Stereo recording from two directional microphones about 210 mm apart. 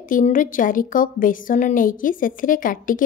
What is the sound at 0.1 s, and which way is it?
A woman's voice, 40° left (ahead or behind).